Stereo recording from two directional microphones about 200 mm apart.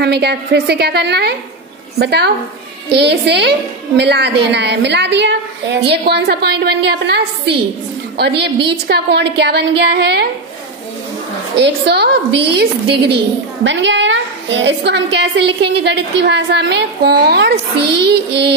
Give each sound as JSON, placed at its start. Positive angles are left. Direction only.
{"t": 0.0, "sound": "a woman's voice", "side_deg": -55}
{"t": 11.5, "sound": "a woman's voice", "side_deg": -55}